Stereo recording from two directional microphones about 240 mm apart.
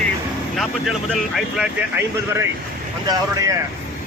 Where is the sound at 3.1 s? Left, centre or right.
Centre.